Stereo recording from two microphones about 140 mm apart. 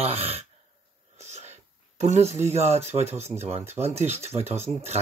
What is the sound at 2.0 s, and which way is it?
Speech, 50° right (ahead or behind).